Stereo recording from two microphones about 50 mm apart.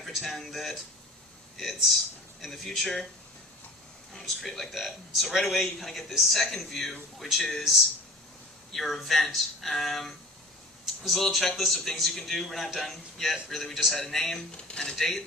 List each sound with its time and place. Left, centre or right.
0.0 s a man's voice: centre
4.4 s a man's voice: centre
8.7 s a man's voice: centre
11.3 s a man's voice: centre
14.5 s speech: centre
14.9 s speech: centre